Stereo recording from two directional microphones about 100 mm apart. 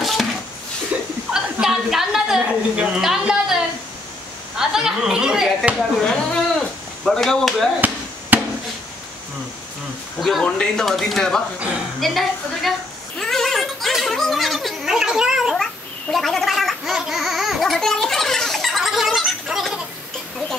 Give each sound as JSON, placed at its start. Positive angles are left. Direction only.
{"t": 1.3, "sound": "a sound", "side_deg": -5}
{"t": 4.6, "sound": "speech", "side_deg": -5}
{"t": 8.3, "sound": "chop", "side_deg": -20}
{"t": 10.4, "sound": "speech", "side_deg": 10}
{"t": 13.2, "sound": "a sound", "side_deg": 5}
{"t": 15.5, "sound": "gargling", "side_deg": 5}